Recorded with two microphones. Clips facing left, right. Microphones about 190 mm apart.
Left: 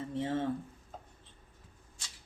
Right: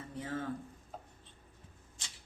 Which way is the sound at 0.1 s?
25° left (ahead or behind).